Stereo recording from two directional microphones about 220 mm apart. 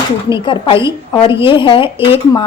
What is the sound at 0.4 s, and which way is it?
Speech, 20° left (ahead or behind).